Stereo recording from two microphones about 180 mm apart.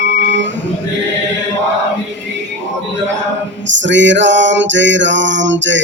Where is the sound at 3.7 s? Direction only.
90° right.